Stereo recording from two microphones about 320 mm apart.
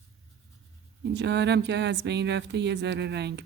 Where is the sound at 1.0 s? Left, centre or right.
Right.